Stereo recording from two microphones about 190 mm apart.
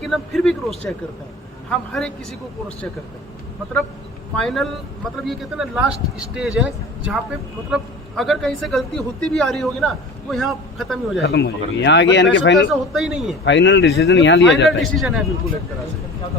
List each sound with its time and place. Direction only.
0.1 s speech: centre (ahead or behind)
4.4 s speech: centre (ahead or behind)
11.2 s speech: 60° left (ahead or behind)
12.9 s speech: centre (ahead or behind)
13.4 s speech: 70° left (ahead or behind)
14.8 s speech: centre (ahead or behind)